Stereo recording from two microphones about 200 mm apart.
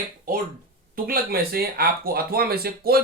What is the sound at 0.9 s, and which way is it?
Speech, 50° right (ahead or behind).